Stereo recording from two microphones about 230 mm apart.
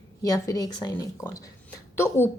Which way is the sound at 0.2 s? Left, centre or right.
Centre.